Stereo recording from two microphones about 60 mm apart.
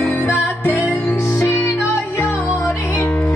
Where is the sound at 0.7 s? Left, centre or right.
Left.